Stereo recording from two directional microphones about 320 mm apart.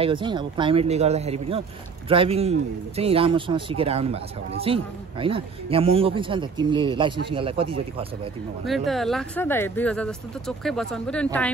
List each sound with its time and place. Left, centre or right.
0.0 s speech: centre
8.6 s speech: centre